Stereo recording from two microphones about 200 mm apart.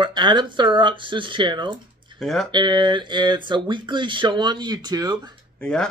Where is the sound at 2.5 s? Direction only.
20° right (ahead or behind).